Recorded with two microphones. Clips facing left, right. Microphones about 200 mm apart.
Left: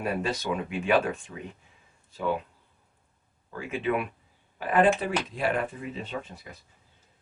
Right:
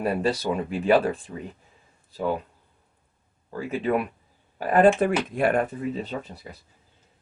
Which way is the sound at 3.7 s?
40° right (ahead or behind).